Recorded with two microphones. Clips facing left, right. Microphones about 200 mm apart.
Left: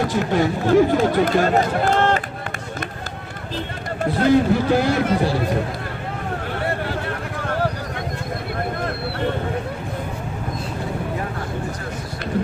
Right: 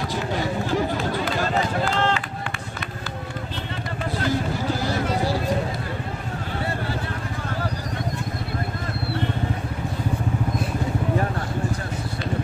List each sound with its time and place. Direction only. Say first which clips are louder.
0.0 s speech: left 7 dB; 55° left (ahead or behind)
4.0 s a man's voice: left 9 dB; 55° left (ahead or behind)